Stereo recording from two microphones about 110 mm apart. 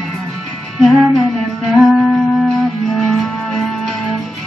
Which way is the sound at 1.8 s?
Centre (ahead or behind).